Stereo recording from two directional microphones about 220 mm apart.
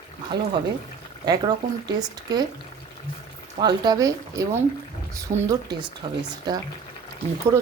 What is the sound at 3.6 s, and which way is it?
Speech, 20° right (ahead or behind).